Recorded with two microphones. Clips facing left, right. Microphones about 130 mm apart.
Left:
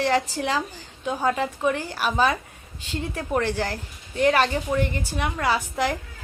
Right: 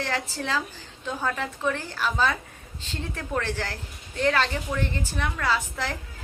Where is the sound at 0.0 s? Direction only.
15° left (ahead or behind).